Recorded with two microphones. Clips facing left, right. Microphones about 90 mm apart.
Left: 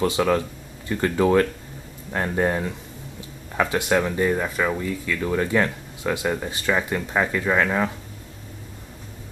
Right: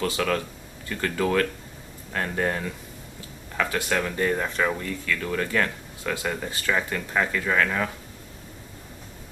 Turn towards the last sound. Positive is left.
turn(degrees=20)  # may be behind; listen again after turning